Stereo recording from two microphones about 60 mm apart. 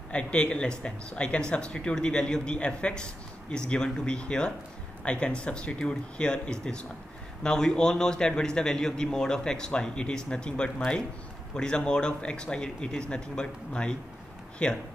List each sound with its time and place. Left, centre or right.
0.1 s speech: centre